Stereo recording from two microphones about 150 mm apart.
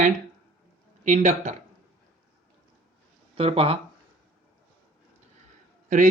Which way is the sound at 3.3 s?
40° right (ahead or behind).